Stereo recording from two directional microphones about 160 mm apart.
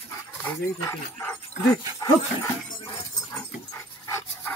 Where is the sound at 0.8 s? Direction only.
15° left (ahead or behind).